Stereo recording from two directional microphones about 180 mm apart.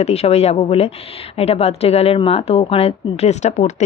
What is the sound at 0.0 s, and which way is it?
A woman's voice, 35° left (ahead or behind).